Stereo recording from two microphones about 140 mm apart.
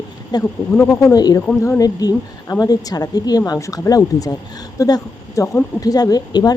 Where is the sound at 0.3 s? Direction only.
30° left (ahead or behind).